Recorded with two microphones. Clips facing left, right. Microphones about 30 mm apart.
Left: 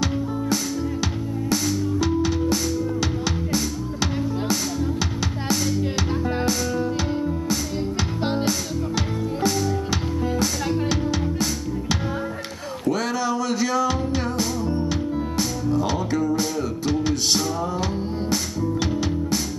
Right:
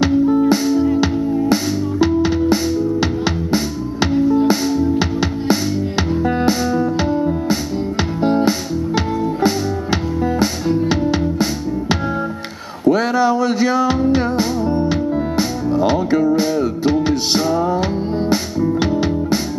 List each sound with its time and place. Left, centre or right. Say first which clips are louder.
0.0 s music: right 12 dB; right
8.2 s music: right 9 dB; left
8.5 s music: right 6 dB; right
12.8 s music: right 9 dB; right